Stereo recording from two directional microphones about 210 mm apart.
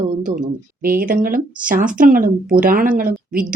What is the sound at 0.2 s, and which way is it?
Speech, 40° right (ahead or behind).